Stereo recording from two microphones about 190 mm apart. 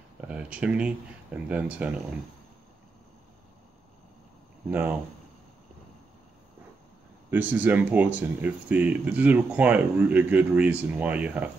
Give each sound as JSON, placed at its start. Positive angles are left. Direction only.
{"t": 0.3, "sound": "speech", "side_deg": -5}
{"t": 4.6, "sound": "speech", "side_deg": -10}
{"t": 7.2, "sound": "speech", "side_deg": -10}